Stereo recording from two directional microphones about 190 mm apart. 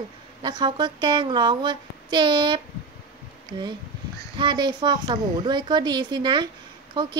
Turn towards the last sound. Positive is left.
turn(degrees=-20)  # may be behind; listen again after turning